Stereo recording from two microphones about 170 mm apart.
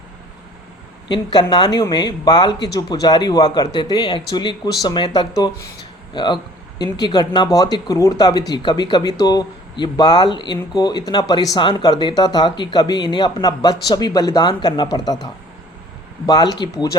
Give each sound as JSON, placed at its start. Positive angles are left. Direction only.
{"t": 1.0, "sound": "speech", "side_deg": 25}